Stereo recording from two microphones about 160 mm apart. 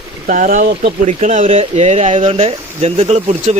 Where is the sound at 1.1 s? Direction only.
45° right (ahead or behind).